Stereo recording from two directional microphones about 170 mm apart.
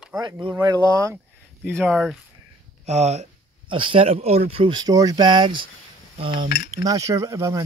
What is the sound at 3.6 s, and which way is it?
Speech, 30° right (ahead or behind).